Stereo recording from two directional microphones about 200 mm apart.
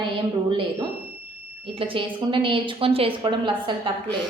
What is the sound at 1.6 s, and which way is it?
A woman's voice, 25° right (ahead or behind).